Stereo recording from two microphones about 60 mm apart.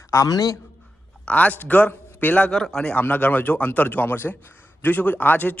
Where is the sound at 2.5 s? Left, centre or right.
Centre.